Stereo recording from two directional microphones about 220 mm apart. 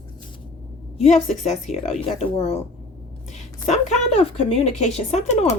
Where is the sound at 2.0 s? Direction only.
30° left (ahead or behind).